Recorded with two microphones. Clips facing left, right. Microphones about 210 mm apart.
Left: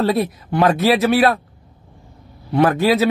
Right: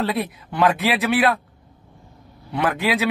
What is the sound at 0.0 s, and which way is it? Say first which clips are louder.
Speech: left 6 dB; 40° left (ahead or behind).